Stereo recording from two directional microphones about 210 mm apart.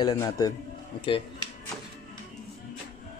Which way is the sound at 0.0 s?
15° left (ahead or behind).